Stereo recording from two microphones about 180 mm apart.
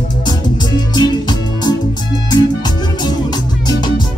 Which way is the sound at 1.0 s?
25° left (ahead or behind).